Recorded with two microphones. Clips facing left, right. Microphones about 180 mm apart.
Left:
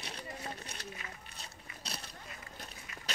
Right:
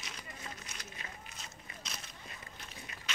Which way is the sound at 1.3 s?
35° left (ahead or behind).